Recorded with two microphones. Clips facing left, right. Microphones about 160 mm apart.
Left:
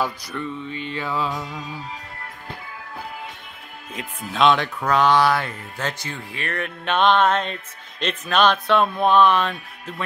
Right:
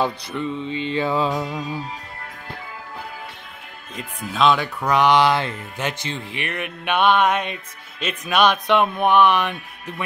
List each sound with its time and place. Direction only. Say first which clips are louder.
0.0 s music: right 3 dB; 20° right (ahead or behind)
3.9 s speech: right 1 dB; centre (ahead or behind); by 10.0 s 15° right (ahead or behind)